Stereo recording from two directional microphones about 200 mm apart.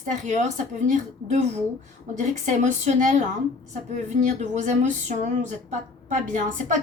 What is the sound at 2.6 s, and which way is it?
Speech, 40° right (ahead or behind).